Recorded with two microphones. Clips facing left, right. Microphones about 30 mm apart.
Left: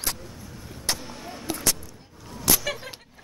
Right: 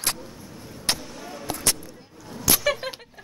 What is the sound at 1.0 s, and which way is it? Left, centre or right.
Vehicle, centre.